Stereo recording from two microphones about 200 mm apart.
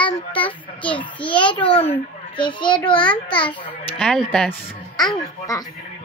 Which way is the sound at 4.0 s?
5° left (ahead or behind).